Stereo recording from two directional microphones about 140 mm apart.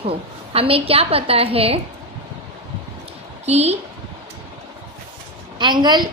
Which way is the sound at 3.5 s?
50° right (ahead or behind).